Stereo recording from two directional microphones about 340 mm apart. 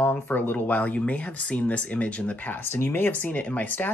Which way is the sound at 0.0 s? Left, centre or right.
Centre.